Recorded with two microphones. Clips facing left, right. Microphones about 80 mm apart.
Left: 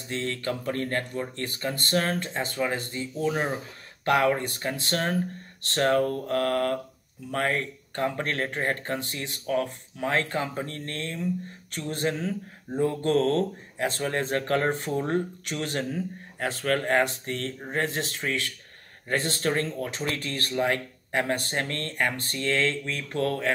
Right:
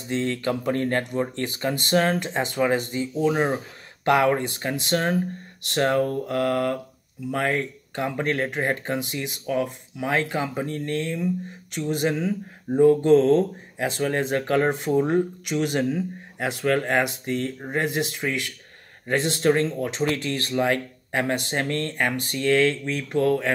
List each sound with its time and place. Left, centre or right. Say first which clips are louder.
0.1 s speech: right 5 dB; centre